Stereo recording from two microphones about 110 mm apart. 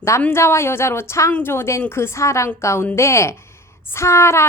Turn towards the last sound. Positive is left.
turn(degrees=25)  # may be behind; listen again after turning